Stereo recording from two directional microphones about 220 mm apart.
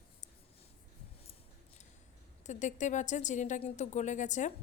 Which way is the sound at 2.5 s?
35° left (ahead or behind).